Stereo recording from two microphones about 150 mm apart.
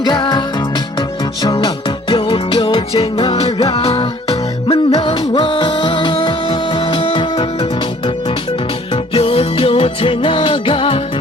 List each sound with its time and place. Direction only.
0.0 s music: 30° left (ahead or behind)
9.1 s music: 40° left (ahead or behind)